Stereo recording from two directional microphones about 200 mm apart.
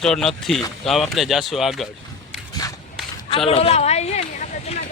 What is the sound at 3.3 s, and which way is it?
Speech, 30° left (ahead or behind).